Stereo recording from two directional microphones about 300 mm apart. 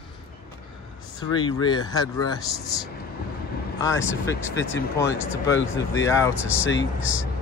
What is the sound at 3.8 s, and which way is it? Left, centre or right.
Speech, centre.